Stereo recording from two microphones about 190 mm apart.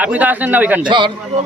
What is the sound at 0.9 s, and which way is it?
Speech, 25° right (ahead or behind).